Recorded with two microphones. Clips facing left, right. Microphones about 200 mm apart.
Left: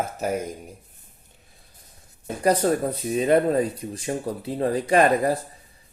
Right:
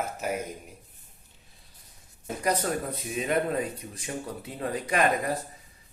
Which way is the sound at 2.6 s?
35° left (ahead or behind).